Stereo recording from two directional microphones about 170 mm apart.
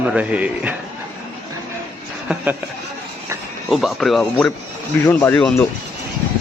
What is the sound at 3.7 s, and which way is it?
A man's voice, centre (ahead or behind).